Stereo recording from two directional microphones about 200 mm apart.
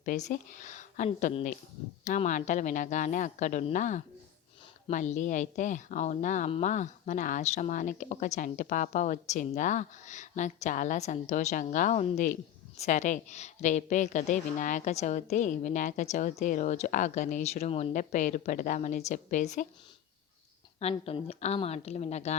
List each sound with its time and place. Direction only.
0.0 s speech: 40° left (ahead or behind)
20.7 s speech: 30° left (ahead or behind)